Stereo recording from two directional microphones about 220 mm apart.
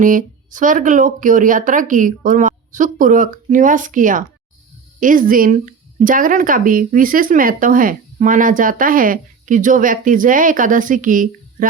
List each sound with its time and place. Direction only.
0.0 s speech: 35° right (ahead or behind)